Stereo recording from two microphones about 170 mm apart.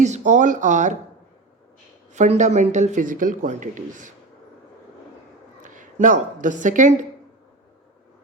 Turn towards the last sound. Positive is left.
turn(degrees=-50)  # may be behind; listen again after turning